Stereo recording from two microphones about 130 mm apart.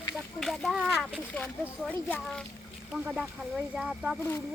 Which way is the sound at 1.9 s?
15° left (ahead or behind).